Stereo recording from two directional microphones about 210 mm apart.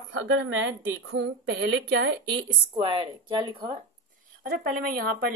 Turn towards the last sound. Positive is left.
turn(degrees=-45)  # may be behind; listen again after turning